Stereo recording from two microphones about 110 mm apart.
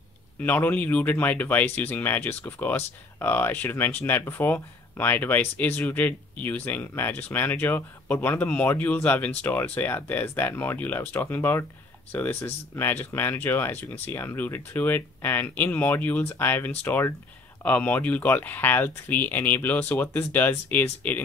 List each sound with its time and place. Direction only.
0.4 s speech: 15° left (ahead or behind)